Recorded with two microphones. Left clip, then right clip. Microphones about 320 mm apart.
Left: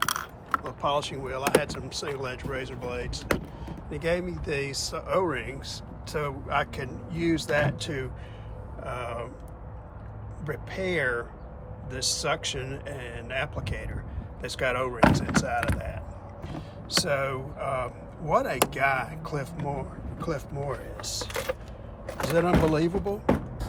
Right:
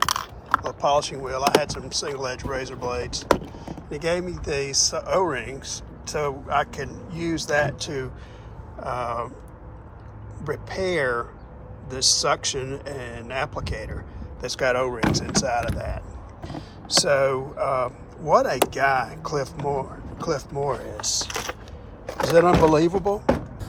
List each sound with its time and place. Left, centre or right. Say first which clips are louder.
0.0 s mechanisms: right 5 dB; centre
1.5 s speech: right 4 dB; centre
10.4 s speech: right 5 dB; centre